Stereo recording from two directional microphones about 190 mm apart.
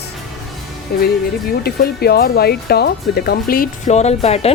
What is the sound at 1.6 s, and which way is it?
Speech, 55° left (ahead or behind).